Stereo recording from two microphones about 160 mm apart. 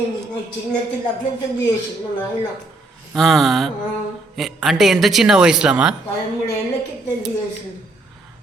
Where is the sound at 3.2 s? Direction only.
Centre (ahead or behind).